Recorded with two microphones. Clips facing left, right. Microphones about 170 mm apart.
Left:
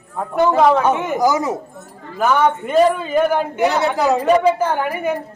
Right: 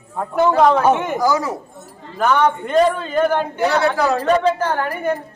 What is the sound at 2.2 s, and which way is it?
A man's voice, 5° left (ahead or behind).